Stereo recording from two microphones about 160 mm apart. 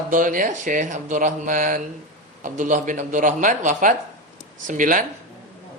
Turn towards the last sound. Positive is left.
turn(degrees=-55)  # may be behind; listen again after turning